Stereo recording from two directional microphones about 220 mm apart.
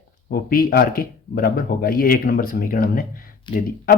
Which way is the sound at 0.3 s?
40° left (ahead or behind).